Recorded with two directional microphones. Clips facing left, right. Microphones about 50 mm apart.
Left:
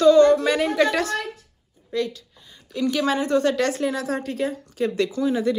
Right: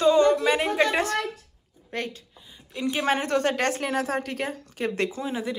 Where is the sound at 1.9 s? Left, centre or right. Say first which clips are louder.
Left 6 dB; right.